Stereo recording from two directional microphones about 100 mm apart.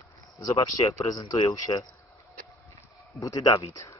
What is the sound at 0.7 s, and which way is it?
Speech, 35° left (ahead or behind).